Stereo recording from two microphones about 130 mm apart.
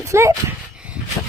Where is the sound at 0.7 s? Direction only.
10° right (ahead or behind).